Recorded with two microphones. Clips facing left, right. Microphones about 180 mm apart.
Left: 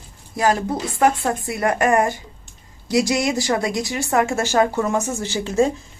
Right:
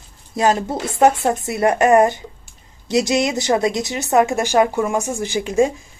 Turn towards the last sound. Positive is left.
turn(degrees=-15)  # may be behind; listen again after turning